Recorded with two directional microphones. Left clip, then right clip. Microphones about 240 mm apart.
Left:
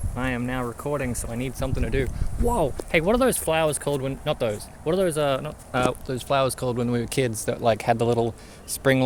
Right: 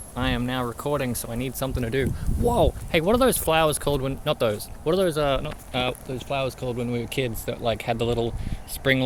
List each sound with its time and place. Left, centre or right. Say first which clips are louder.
0.2 s speech: right 1 dB; centre
6.1 s speech: left 5 dB; left